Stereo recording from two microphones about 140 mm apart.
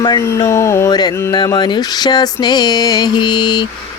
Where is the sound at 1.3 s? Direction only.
30° left (ahead or behind).